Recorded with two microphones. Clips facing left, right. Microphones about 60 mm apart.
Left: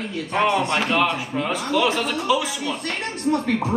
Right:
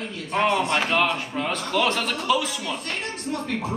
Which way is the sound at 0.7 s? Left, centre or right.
Centre.